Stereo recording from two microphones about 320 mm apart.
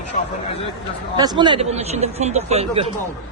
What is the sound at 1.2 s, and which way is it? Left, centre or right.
A man's voice, centre.